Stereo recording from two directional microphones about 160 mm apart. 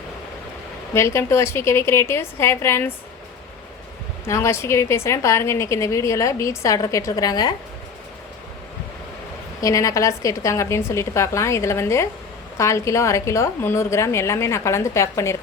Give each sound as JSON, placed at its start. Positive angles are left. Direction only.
{"t": 0.9, "sound": "a woman's voice", "side_deg": 15}
{"t": 4.3, "sound": "a woman's voice", "side_deg": 15}
{"t": 9.6, "sound": "a woman's voice", "side_deg": 20}